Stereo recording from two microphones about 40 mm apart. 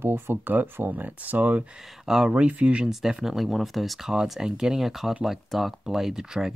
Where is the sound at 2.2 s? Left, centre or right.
Right.